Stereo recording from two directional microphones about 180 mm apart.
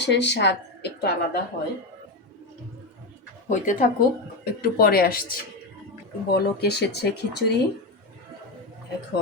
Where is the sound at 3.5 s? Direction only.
45° left (ahead or behind).